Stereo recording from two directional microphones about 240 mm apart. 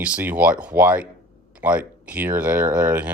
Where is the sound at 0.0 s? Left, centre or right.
Centre.